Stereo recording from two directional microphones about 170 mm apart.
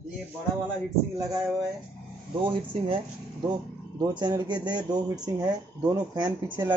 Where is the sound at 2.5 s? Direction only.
30° right (ahead or behind).